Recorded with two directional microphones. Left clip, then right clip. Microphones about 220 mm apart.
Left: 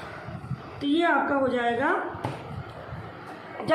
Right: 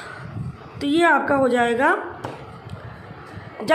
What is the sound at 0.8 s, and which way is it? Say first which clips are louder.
Speech: right 6 dB; 55° right (ahead or behind).